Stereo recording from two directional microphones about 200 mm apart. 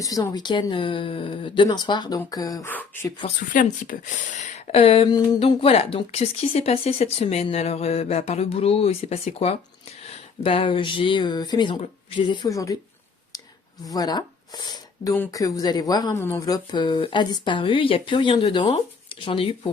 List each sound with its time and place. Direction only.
0.0 s speech: 15° left (ahead or behind)
3.5 s speech: 40° left (ahead or behind); by 12.7 s 15° left (ahead or behind)
13.9 s speech: 20° left (ahead or behind)
16.7 s speech: 20° left (ahead or behind)